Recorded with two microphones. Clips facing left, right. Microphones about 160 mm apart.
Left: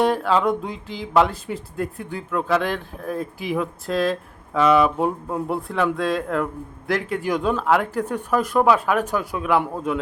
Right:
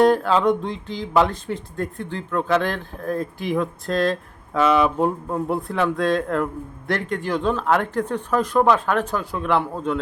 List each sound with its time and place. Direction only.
0.0 s speech: centre (ahead or behind)